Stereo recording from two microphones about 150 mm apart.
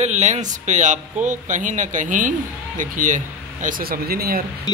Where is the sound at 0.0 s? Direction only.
50° right (ahead or behind).